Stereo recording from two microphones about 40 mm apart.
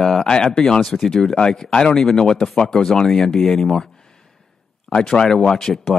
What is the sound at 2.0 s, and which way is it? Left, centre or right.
Speech, centre.